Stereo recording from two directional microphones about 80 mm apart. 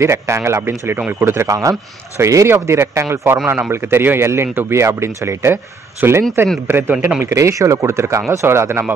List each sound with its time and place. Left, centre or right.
0.0 s speech: right
7.2 s speech: right